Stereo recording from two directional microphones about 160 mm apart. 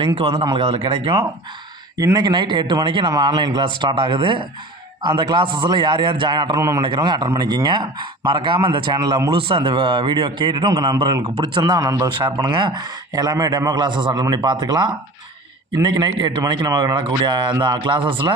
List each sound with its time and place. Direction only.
0.6 s speech: 40° right (ahead or behind)
2.0 s a man's voice: 25° right (ahead or behind)